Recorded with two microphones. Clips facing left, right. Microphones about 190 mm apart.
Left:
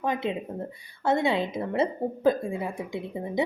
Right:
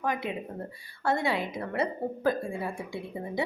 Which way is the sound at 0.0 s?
25° left (ahead or behind).